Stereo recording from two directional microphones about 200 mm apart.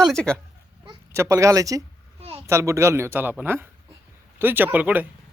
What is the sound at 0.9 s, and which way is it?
Speech, 15° right (ahead or behind).